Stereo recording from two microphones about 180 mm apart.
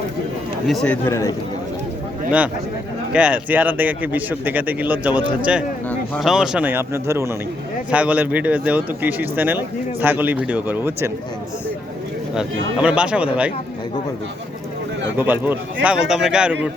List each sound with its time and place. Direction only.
0.7 s speech: centre (ahead or behind)
1.0 s a man's voice: 15° left (ahead or behind)
3.1 s speech: 5° right (ahead or behind)
12.3 s speech: 5° right (ahead or behind)
15.2 s speech: 10° right (ahead or behind)